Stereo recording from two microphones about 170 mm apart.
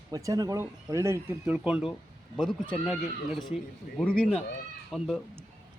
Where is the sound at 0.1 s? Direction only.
20° right (ahead or behind).